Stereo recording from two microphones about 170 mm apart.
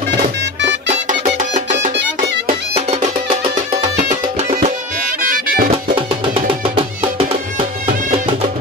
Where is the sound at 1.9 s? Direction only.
70° right (ahead or behind).